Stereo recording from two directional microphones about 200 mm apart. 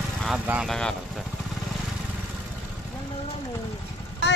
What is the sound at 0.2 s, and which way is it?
Speech, 5° right (ahead or behind).